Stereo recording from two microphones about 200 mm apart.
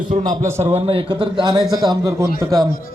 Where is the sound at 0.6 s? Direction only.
30° right (ahead or behind).